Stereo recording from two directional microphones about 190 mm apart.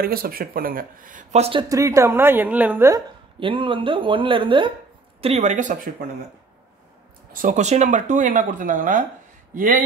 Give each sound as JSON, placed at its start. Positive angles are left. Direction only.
{"t": 0.0, "sound": "speech", "side_deg": -50}
{"t": 3.3, "sound": "speech", "side_deg": -25}
{"t": 7.3, "sound": "speech", "side_deg": -40}